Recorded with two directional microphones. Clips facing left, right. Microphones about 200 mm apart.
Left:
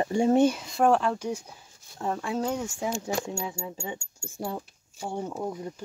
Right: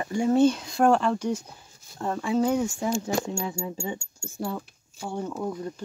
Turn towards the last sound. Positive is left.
turn(degrees=15)  # may be behind; listen again after turning